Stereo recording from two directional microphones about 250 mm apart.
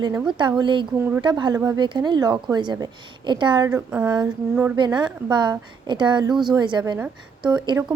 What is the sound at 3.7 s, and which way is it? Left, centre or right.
Speech, centre.